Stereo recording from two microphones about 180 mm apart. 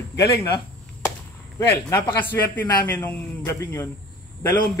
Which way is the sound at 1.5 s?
15° left (ahead or behind).